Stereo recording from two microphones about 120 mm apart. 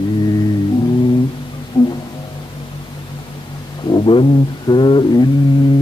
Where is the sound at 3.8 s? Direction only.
40° left (ahead or behind).